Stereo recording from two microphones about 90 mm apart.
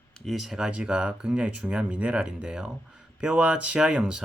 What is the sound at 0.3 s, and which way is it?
Speech, centre (ahead or behind).